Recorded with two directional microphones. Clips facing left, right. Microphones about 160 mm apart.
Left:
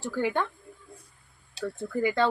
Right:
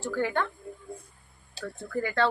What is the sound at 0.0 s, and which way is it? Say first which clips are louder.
Speech: even; 15° left (ahead or behind).